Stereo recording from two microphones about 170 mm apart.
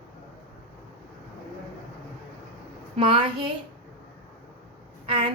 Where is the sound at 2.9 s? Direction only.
30° right (ahead or behind).